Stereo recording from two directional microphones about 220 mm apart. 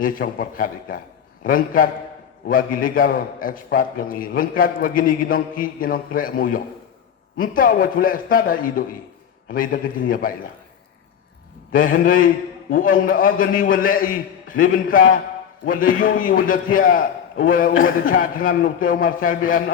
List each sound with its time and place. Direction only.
0.0 s a man's voice: 40° left (ahead or behind)
11.7 s a man's voice: 40° left (ahead or behind)